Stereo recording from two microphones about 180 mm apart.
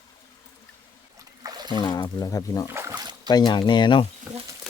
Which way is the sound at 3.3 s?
25° left (ahead or behind).